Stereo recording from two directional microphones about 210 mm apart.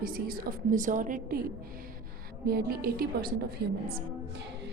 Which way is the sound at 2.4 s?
45° right (ahead or behind).